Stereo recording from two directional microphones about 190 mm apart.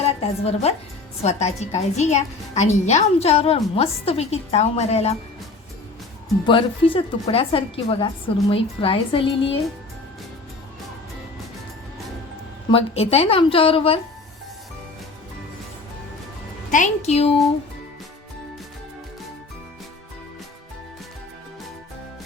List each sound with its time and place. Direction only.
0.0 s a woman's voice: 35° left (ahead or behind)
6.4 s a woman's voice: 25° left (ahead or behind)
12.7 s a woman's voice: 30° left (ahead or behind)
16.7 s a woman's voice: 40° left (ahead or behind)